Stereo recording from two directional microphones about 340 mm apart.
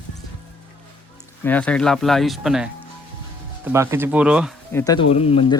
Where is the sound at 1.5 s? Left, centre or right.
Centre.